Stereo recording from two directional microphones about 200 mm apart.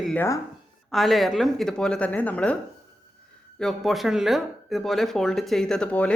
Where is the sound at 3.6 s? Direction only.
Centre (ahead or behind).